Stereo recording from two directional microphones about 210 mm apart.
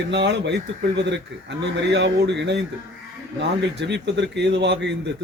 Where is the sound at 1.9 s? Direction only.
55° right (ahead or behind).